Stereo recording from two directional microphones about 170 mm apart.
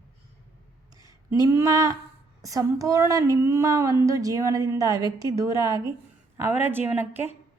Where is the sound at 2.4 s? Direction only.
20° right (ahead or behind).